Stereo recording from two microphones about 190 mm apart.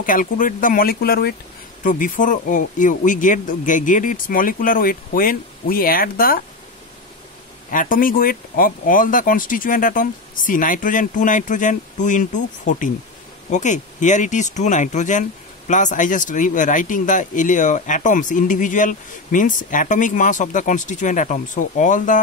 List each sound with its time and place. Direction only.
0.0 s speech: 45° left (ahead or behind)
7.7 s speech: 45° left (ahead or behind)